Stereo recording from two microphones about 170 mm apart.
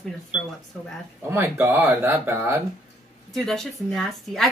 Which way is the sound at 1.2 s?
15° right (ahead or behind).